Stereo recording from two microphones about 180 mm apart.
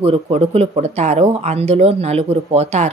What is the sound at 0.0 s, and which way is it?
A woman's voice, 35° right (ahead or behind).